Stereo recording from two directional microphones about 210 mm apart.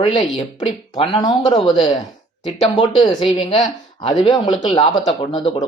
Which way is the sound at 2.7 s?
25° left (ahead or behind).